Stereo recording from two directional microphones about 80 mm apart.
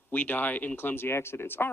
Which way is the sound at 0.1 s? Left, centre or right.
Left.